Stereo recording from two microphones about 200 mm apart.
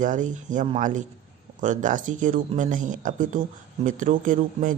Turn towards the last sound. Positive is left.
turn(degrees=-40)  # may be behind; listen again after turning